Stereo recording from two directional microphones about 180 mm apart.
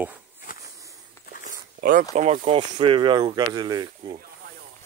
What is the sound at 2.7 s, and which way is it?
Speech, 30° right (ahead or behind).